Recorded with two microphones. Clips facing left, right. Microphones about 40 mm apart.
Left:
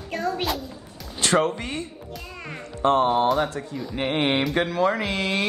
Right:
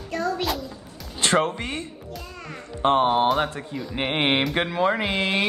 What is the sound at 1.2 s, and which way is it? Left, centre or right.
Speech, right.